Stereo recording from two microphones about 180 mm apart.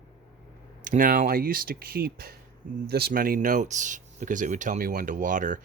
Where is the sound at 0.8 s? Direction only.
45° right (ahead or behind).